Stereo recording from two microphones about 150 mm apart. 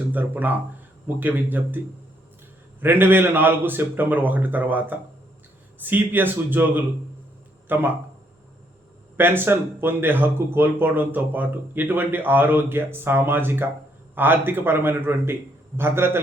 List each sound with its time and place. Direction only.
0.1 s speech: 10° right (ahead or behind)
2.8 s speech: 15° right (ahead or behind)
9.1 s speech: 15° right (ahead or behind)